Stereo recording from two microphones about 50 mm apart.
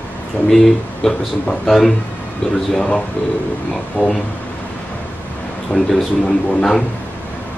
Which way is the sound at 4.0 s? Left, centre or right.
Left.